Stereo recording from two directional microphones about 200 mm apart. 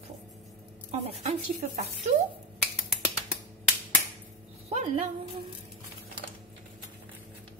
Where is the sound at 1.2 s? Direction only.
35° right (ahead or behind).